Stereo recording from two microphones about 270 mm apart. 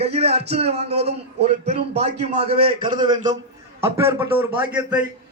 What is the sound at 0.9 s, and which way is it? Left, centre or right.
Speech, right.